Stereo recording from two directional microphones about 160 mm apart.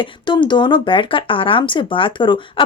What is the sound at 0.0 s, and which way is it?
Speech, 30° left (ahead or behind).